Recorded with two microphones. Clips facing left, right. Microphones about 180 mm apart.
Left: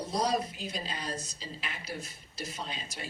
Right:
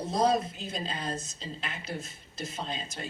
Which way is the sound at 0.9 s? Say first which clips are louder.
Right 3 dB; 25° right (ahead or behind).